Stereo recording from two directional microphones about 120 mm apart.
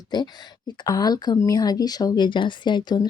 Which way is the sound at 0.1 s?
35° left (ahead or behind).